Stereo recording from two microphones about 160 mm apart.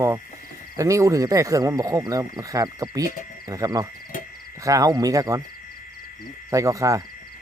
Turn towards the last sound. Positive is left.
turn(degrees=-20)  # may be behind; listen again after turning